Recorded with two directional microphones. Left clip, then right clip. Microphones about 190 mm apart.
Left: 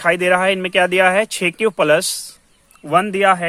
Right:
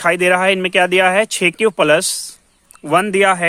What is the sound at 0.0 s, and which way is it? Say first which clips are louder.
Speech: right 1 dB; 25° right (ahead or behind).